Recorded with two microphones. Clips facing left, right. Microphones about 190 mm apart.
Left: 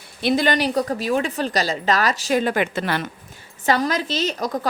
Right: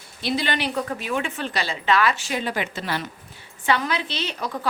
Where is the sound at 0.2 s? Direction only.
50° left (ahead or behind).